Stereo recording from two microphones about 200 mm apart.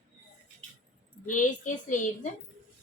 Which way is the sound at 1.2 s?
40° left (ahead or behind).